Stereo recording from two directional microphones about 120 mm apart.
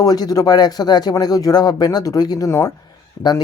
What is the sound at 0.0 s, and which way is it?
Speech, 30° left (ahead or behind).